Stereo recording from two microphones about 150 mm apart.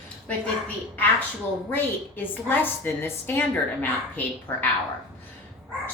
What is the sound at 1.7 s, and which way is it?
A woman's voice, 15° left (ahead or behind).